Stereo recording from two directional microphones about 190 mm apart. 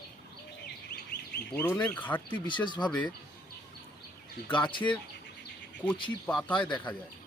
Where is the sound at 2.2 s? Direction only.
25° left (ahead or behind).